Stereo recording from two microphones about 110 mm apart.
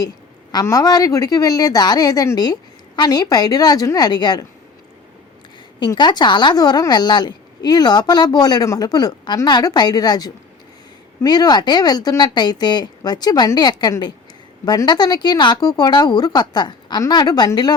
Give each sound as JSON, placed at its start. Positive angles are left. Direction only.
{"t": 0.6, "sound": "a woman's voice", "side_deg": 30}
{"t": 5.8, "sound": "a woman's voice", "side_deg": 40}